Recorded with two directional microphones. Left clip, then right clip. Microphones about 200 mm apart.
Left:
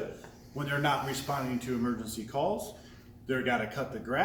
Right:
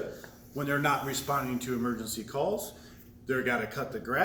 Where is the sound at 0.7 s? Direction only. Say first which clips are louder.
Right 1 dB; 15° left (ahead or behind).